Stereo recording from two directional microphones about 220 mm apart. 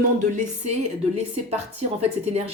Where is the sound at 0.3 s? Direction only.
35° right (ahead or behind).